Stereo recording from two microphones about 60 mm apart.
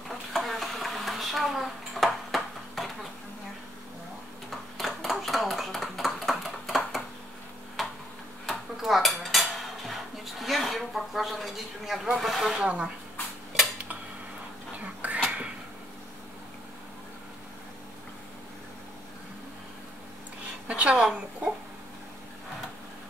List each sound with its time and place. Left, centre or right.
0.3 s dishes: centre
4.5 s a sound: centre
7.8 s tick-tock: centre
8.5 s cutlery: centre
10.4 s a sound: centre
12.2 s speech: centre
12.5 s speech: centre
14.7 s cutlery: right
20.6 s a sound: centre